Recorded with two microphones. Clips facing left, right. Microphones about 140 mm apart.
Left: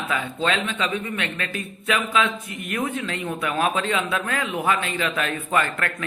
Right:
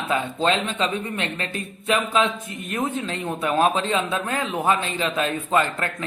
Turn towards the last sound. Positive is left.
turn(degrees=-25)  # may be behind; listen again after turning